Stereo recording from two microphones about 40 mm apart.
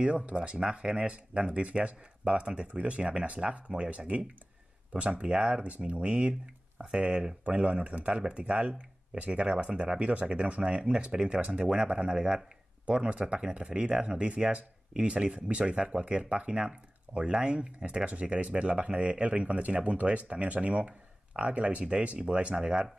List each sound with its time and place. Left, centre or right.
0.0 s speech: right
5.2 s speech: right
13.3 s speech: centre